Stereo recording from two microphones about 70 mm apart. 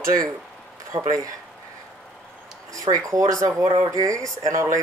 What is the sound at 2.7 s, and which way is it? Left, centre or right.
Speech, right.